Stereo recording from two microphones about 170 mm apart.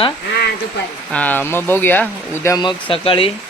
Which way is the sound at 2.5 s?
30° left (ahead or behind).